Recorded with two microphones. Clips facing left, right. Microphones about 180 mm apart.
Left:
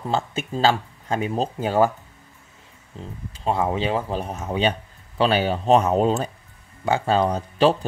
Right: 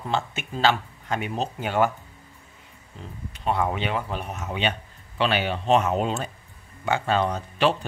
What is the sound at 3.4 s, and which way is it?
A man's voice, 30° left (ahead or behind).